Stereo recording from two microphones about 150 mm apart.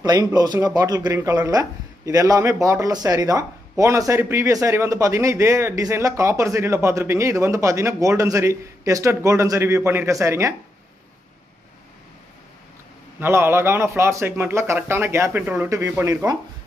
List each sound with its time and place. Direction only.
0.0 s speech: 25° right (ahead or behind)
13.2 s a man's voice: 15° right (ahead or behind)